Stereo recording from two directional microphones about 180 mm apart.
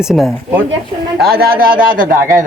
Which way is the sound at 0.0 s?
Centre (ahead or behind).